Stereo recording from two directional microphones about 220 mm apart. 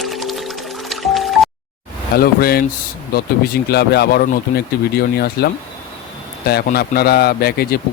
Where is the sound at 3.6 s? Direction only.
45° left (ahead or behind).